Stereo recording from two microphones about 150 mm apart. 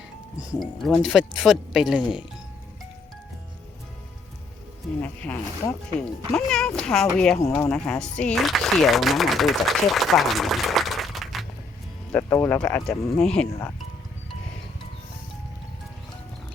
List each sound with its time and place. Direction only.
0.6 s a woman's voice: centre (ahead or behind)
5.0 s a woman's voice: 10° left (ahead or behind)
7.3 s speech: 20° left (ahead or behind)
7.7 s a woman's voice: 5° left (ahead or behind)
12.1 s speech: 15° left (ahead or behind)
12.6 s a woman's voice: 5° left (ahead or behind)
13.5 s speech: 20° left (ahead or behind)